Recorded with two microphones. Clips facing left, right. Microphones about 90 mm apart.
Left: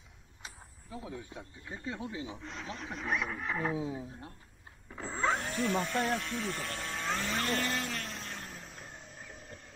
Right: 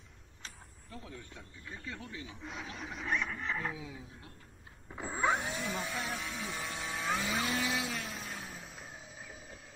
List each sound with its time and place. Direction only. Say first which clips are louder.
0.4 s speech: left 2 dB; 10° left (ahead or behind)
2.4 s speech: left 1 dB; 5° right (ahead or behind)
3.7 s speech: left 10 dB; 35° left (ahead or behind)
4.8 s a sound: even; 15° right (ahead or behind)